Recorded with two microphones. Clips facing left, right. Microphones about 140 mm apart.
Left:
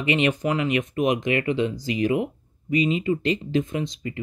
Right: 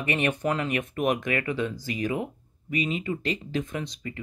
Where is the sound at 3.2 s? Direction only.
40° right (ahead or behind).